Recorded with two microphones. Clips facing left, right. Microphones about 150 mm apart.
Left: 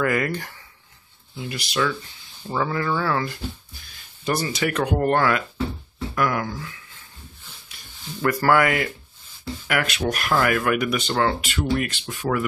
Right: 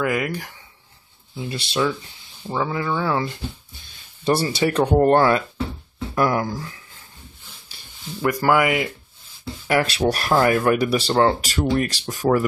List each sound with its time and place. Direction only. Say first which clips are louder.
0.0 s speech: even; 10° right (ahead or behind)
1.3 s speech: right 2 dB; 25° right (ahead or behind)
2.4 s speech: even; 15° right (ahead or behind); by 6.8 s 35° right (ahead or behind)
7.7 s a sound: right 1 dB; 30° right (ahead or behind)
8.2 s speech: even; 15° right (ahead or behind)
9.7 s speech: right 5 dB; 30° right (ahead or behind)